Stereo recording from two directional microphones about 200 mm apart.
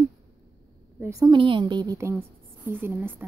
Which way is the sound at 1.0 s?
15° right (ahead or behind).